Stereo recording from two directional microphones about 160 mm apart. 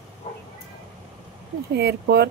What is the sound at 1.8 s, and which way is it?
Speech, 90° right.